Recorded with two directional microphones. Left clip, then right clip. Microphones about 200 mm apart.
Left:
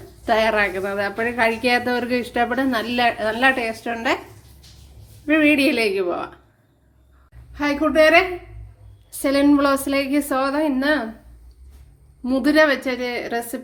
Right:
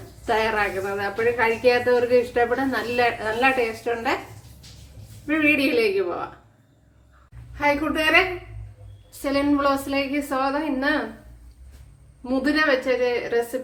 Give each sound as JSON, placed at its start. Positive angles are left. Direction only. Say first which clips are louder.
{"t": 0.3, "sound": "a woman's voice", "louder": "left 4 dB", "side_deg": 45}
{"t": 5.2, "sound": "a woman's voice", "louder": "left 4 dB", "side_deg": 45}
{"t": 7.5, "sound": "a woman's voice", "louder": "left 3 dB", "side_deg": 40}
{"t": 9.2, "sound": "a woman's voice", "louder": "left 4 dB", "side_deg": 50}
{"t": 12.2, "sound": "a woman's voice", "louder": "left 5 dB", "side_deg": 50}